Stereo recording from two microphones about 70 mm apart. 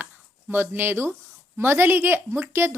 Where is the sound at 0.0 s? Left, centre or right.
Right.